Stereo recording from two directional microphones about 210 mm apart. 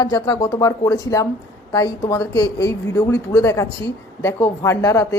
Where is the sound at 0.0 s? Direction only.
15° left (ahead or behind).